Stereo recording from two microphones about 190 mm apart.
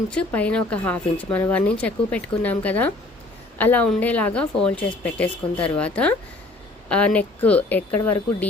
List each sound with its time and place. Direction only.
0.1 s speech: 5° left (ahead or behind)